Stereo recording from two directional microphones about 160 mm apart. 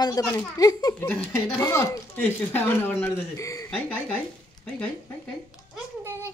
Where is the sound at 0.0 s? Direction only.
20° left (ahead or behind).